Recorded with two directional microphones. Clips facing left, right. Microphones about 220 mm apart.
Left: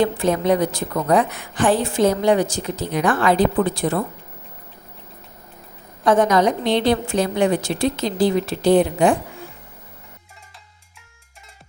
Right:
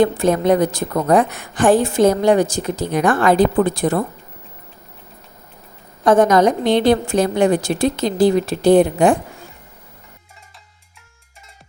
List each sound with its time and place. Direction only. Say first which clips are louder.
0.0 s a woman's voice: right 3 dB; 45° right (ahead or behind)
6.1 s a woman's voice: right 3 dB; 45° right (ahead or behind)